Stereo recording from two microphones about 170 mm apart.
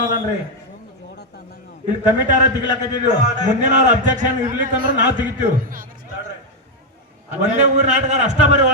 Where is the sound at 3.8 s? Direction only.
50° right (ahead or behind).